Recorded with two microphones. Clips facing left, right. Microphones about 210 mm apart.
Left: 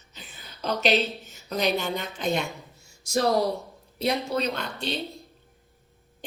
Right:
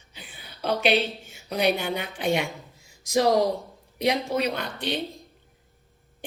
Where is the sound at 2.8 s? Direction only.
90° right.